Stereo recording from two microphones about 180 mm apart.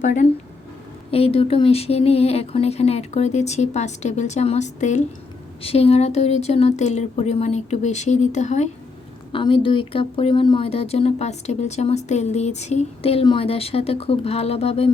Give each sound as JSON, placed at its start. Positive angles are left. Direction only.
{"t": 0.0, "sound": "speech", "side_deg": 40}
{"t": 9.3, "sound": "speech", "side_deg": 30}